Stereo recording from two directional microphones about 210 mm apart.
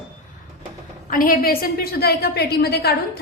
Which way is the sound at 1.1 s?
40° left (ahead or behind).